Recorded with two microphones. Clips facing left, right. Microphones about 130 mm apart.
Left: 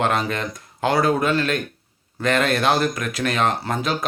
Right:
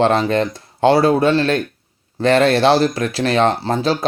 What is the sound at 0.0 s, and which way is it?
Speech, 30° right (ahead or behind).